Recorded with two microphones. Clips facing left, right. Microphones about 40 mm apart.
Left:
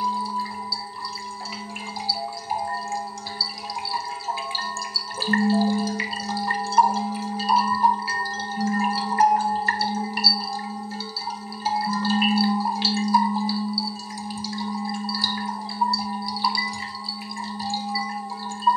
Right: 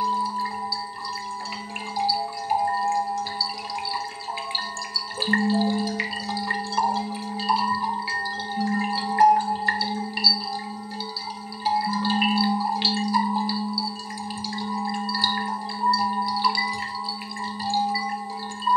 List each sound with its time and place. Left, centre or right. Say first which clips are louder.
2.0 s music: right 5 dB; right
2.6 s a sound: right 5 dB; right
5.3 s music: left 1 dB; right
10.1 s a sound: right 1 dB; centre
11.6 s music: right 1 dB; centre
12.2 s a sound: left 2 dB; centre
12.7 s tubular bells: left 2 dB; right
14.8 s music: right 4 dB; right
18.7 s wind chime: even; centre